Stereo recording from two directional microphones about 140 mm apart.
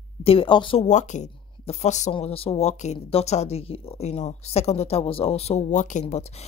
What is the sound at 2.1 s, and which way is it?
Speech, 45° left (ahead or behind).